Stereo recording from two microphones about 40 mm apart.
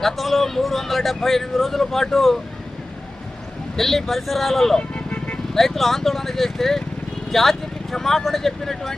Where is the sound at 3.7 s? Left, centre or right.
Centre.